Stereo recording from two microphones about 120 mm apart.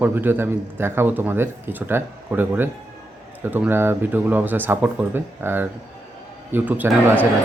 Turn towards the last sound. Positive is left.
turn(degrees=-15)  # may be behind; listen again after turning